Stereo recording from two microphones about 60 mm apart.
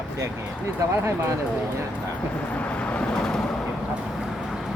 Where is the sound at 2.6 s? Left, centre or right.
Left.